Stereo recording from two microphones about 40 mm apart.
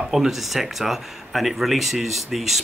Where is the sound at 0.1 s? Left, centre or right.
Centre.